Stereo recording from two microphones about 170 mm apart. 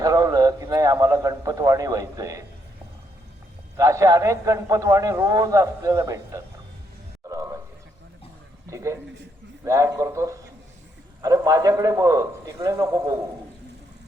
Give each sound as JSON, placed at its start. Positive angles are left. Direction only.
{"t": 0.0, "sound": "a man's voice", "side_deg": -20}
{"t": 3.8, "sound": "a man's voice", "side_deg": -20}
{"t": 7.3, "sound": "a sound", "side_deg": -20}
{"t": 8.7, "sound": "a man's voice", "side_deg": -20}